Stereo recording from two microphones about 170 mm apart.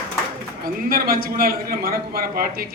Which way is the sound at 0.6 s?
60° right (ahead or behind).